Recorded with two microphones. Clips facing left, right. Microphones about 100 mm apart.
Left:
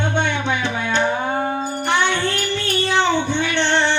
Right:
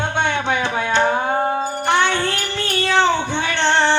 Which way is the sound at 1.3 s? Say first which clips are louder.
Right 2 dB; 25° right (ahead or behind).